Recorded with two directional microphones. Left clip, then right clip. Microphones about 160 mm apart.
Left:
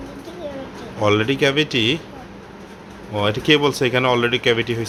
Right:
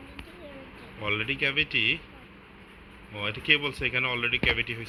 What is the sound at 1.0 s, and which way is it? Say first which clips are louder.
Speech: left 10 dB; 20° left (ahead or behind).